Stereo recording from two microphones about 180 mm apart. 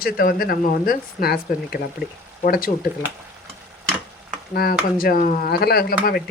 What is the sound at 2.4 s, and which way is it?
Stir, 55° left (ahead or behind).